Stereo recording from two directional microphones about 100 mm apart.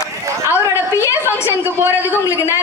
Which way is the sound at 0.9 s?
30° left (ahead or behind).